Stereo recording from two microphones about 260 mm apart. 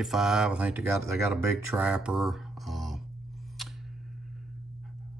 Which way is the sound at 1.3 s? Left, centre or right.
Centre.